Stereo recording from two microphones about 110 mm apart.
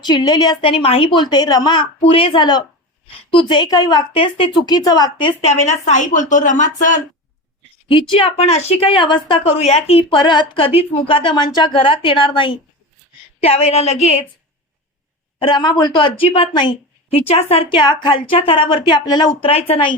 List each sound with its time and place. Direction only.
0.0 s a woman's voice: 40° left (ahead or behind)
2.0 s a woman's voice: 55° left (ahead or behind); by 4.0 s 35° left (ahead or behind)
4.1 s a woman's voice: 55° left (ahead or behind)
4.6 s a woman's voice: 35° left (ahead or behind)
5.4 s a woman's voice: 85° left
7.9 s a woman's voice: 50° left (ahead or behind)
8.4 s a woman's voice: 75° left (ahead or behind); by 9.5 s 50° left (ahead or behind)
9.5 s a woman's voice: 75° left (ahead or behind); by 10.7 s 50° left (ahead or behind)
10.8 s a woman's voice: 60° left (ahead or behind)
13.4 s a woman's voice: 70° left (ahead or behind)
15.4 s a woman's voice: 45° left (ahead or behind)
17.2 s a woman's voice: 60° left (ahead or behind)
19.5 s a woman's voice: 65° left (ahead or behind)